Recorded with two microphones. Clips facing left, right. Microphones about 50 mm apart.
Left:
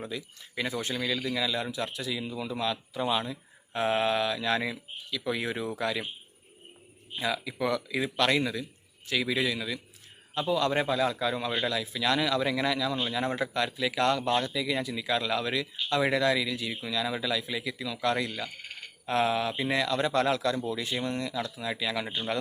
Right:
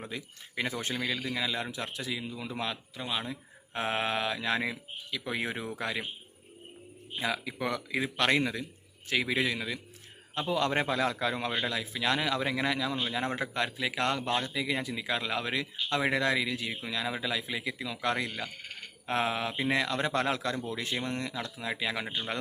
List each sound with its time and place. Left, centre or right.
0.1 s a man's voice: right
7.2 s a man's voice: right